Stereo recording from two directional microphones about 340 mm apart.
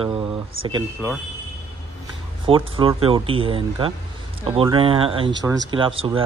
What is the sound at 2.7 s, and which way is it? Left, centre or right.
Speech, centre.